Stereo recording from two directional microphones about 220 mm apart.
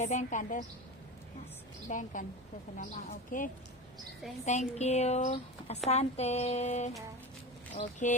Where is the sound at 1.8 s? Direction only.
35° left (ahead or behind).